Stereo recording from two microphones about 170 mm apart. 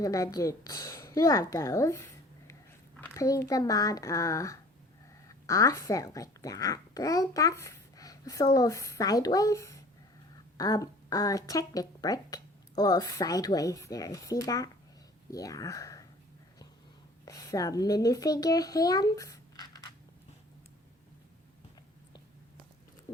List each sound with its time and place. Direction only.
0.0 s a woman's voice: 20° left (ahead or behind)
17.2 s a child's voice: 20° left (ahead or behind)